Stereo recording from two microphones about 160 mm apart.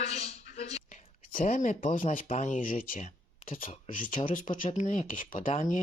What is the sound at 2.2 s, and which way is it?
Speech, 45° left (ahead or behind).